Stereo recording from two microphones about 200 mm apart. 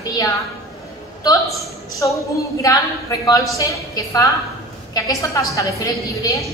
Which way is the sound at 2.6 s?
20° left (ahead or behind).